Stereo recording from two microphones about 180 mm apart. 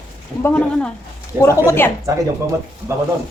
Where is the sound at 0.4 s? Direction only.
5° left (ahead or behind).